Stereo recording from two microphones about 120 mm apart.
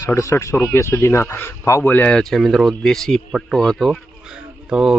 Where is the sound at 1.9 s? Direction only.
10° left (ahead or behind).